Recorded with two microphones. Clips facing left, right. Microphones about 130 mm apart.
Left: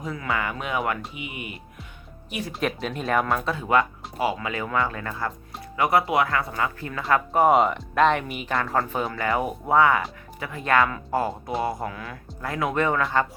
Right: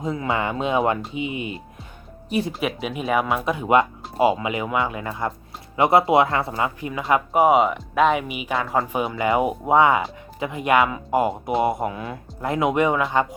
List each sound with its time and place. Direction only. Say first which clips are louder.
0.0 s speech: right 4 dB; 25° right (ahead or behind)
2.5 s speech: right 1 dB; 5° right (ahead or behind)
3.4 s speech: right 4 dB; 15° right (ahead or behind)
6.5 s speech: right 3 dB; 15° right (ahead or behind)
9.1 s speech: right 7 dB; 20° right (ahead or behind)